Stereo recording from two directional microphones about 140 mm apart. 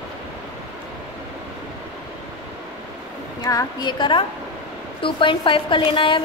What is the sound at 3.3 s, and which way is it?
A woman's voice, 30° left (ahead or behind).